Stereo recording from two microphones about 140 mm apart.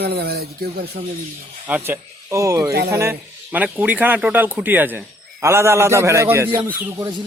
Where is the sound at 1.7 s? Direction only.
10° right (ahead or behind).